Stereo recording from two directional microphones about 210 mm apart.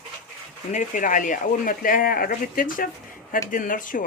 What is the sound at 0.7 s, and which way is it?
Speech, 35° left (ahead or behind).